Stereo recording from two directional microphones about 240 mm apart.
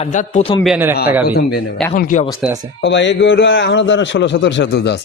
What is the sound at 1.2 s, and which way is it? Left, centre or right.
Speech, left.